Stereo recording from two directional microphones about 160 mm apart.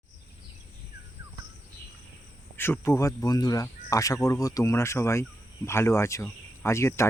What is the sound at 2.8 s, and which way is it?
Speech, 20° left (ahead or behind).